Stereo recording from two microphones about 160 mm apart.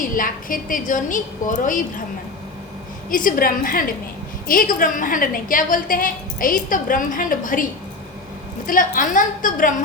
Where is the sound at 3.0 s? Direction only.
60° left (ahead or behind).